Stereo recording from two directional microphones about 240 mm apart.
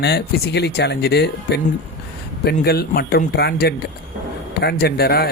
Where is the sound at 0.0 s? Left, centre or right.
Left.